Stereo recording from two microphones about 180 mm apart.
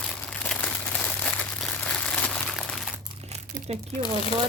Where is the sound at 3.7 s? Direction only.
35° right (ahead or behind).